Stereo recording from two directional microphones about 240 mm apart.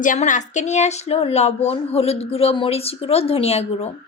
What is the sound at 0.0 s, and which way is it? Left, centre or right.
Speech, left.